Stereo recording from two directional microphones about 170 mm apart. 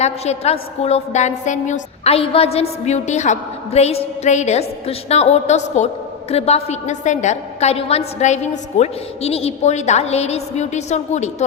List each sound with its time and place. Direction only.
0.0 s a woman's voice: 40° left (ahead or behind)